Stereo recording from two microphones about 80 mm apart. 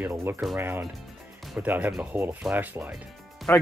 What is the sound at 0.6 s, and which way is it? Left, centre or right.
Speech, right.